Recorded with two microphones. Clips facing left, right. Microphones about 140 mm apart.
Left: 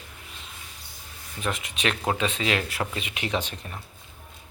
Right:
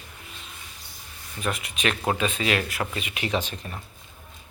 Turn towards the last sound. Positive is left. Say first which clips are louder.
# right 1 dB
turn(degrees=25)  # may be behind; listen again after turning